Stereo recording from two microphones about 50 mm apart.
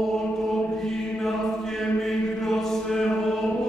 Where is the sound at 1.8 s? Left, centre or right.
Centre.